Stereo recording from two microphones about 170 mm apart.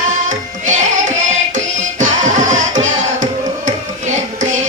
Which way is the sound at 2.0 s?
45° right (ahead or behind).